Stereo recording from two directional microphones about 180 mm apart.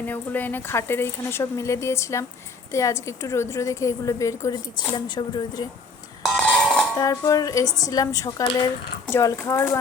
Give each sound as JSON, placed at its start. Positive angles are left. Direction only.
{"t": 0.1, "sound": "speech", "side_deg": 10}
{"t": 6.2, "sound": "music", "side_deg": 0}
{"t": 7.0, "sound": "speech", "side_deg": 20}